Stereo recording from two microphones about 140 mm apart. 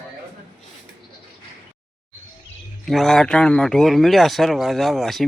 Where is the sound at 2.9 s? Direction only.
Centre (ahead or behind).